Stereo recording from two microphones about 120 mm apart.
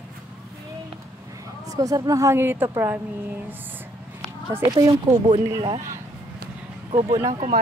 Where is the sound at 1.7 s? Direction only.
30° right (ahead or behind).